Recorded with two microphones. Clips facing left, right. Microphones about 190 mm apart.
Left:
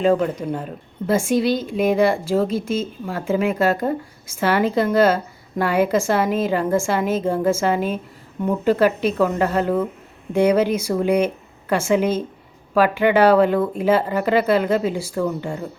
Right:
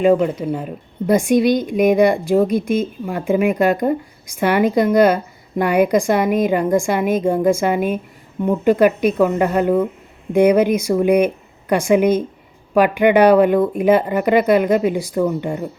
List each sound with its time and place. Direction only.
0.0 s a woman's voice: 10° right (ahead or behind)